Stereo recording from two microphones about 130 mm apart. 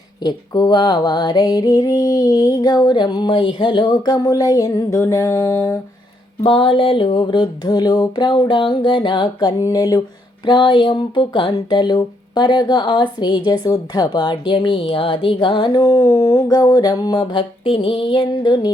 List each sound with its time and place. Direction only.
0.2 s mantra: 30° left (ahead or behind)
6.4 s speech: 40° left (ahead or behind)